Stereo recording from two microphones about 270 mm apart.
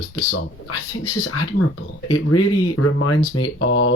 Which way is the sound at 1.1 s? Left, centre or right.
Left.